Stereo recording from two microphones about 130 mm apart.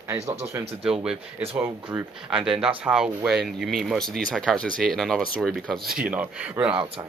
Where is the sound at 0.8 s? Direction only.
5° right (ahead or behind).